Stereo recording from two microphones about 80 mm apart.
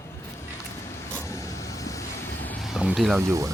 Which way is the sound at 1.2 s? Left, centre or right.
Left.